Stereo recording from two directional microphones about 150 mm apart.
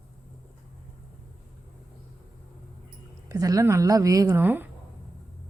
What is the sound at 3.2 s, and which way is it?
A woman's voice, 25° right (ahead or behind).